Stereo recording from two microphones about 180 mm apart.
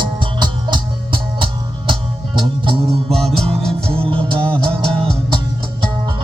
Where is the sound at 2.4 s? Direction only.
30° right (ahead or behind).